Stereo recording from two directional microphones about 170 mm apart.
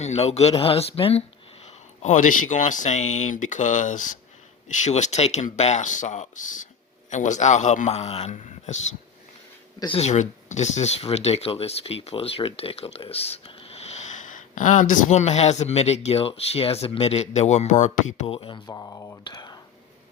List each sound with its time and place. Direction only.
0.0 s speech: 40° left (ahead or behind)
10.1 s speech: 45° left (ahead or behind)
18.3 s speech: 30° left (ahead or behind)